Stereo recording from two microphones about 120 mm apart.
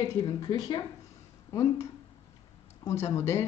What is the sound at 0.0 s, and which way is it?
A woman's voice, 35° left (ahead or behind).